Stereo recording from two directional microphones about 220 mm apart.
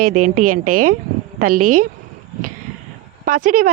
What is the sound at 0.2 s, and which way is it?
Speech, 90° right.